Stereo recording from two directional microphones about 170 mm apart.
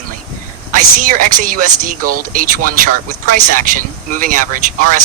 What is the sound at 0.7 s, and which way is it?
A man's voice, 50° right (ahead or behind).